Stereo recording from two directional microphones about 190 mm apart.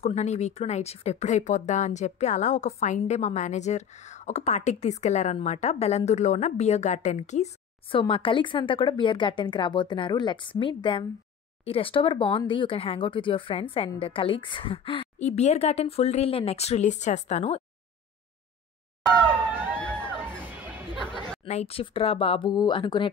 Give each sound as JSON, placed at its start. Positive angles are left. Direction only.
{"t": 0.0, "sound": "speech", "side_deg": 35}
{"t": 19.0, "sound": "a sound", "side_deg": 5}
{"t": 19.3, "sound": "a sound", "side_deg": -10}
{"t": 19.7, "sound": "crowd", "side_deg": 5}
{"t": 21.0, "sound": "chatter", "side_deg": 25}
{"t": 21.5, "sound": "speech", "side_deg": 35}